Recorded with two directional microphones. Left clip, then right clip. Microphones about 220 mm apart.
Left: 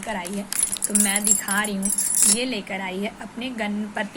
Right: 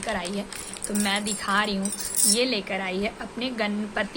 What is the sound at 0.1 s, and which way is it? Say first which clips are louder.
A woman's voice: even; 10° right (ahead or behind).